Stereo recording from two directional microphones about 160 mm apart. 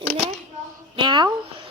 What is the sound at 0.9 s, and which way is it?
Speech, 30° right (ahead or behind).